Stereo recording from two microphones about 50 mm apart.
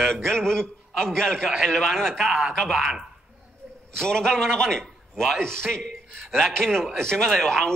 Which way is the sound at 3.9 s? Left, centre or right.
Centre.